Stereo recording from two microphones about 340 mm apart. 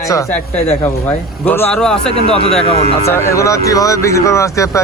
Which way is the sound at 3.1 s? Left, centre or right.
Centre.